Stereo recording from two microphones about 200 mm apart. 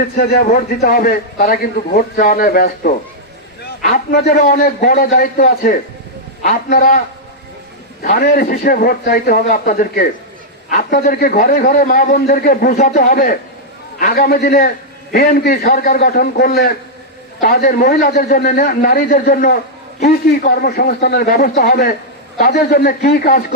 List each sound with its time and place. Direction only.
0.0 s a man's voice: 50° left (ahead or behind)
8.0 s a man's voice: 50° left (ahead or behind)